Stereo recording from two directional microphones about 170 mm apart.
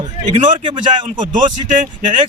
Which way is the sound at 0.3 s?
35° right (ahead or behind).